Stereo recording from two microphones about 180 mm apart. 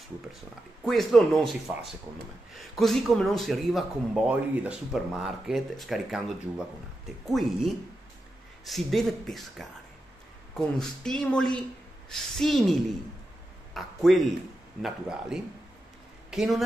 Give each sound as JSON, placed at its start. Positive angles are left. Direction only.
{"t": 0.8, "sound": "speech", "side_deg": 0}
{"t": 7.2, "sound": "speech", "side_deg": 0}
{"t": 10.8, "sound": "speech", "side_deg": 5}
{"t": 13.7, "sound": "speech", "side_deg": 0}